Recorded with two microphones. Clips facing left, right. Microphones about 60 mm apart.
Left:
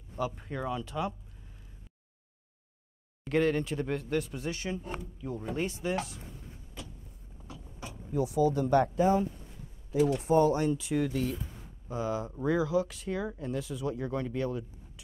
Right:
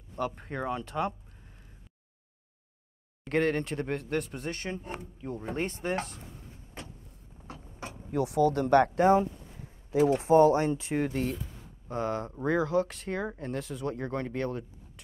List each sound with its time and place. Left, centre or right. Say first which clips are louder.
0.1 s speech: right 1 dB; right
3.3 s speech: even; right
6.8 s vehicle: right 2 dB; right
7.4 s a sound: right 2 dB; right
7.8 s speech: right 1 dB; right
11.9 s speech: right 1 dB; right